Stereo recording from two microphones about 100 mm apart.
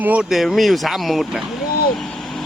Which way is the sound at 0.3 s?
Centre (ahead or behind).